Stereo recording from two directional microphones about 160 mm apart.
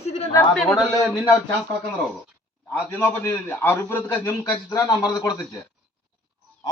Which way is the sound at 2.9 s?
15° left (ahead or behind).